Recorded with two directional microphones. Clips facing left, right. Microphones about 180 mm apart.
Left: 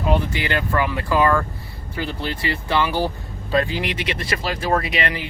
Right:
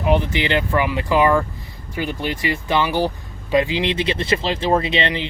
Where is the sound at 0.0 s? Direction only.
20° right (ahead or behind).